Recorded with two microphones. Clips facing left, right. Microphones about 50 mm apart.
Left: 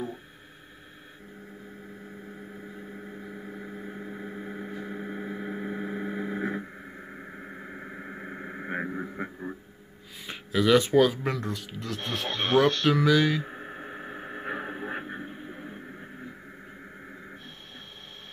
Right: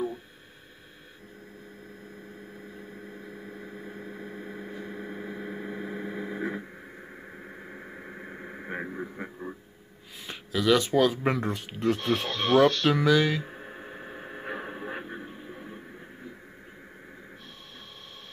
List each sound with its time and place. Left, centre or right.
3.3 s vehicle: centre
10.2 s speech: centre
11.2 s a man's voice: right
12.3 s speech: left
12.9 s speech: centre
13.5 s radio: centre